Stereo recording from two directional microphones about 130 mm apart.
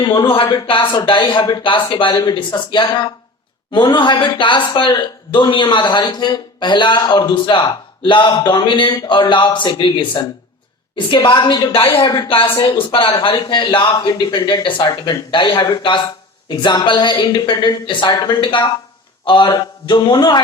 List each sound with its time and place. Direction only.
0.1 s a woman's voice: 40° left (ahead or behind)
11.9 s speech: 25° left (ahead or behind)
12.6 s a woman's voice: 45° left (ahead or behind)